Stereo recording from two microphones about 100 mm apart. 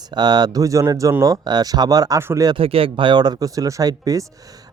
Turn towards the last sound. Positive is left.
turn(degrees=-35)  # may be behind; listen again after turning